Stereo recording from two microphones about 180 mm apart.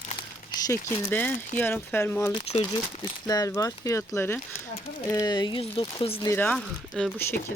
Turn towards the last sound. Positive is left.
turn(degrees=5)  # may be behind; listen again after turning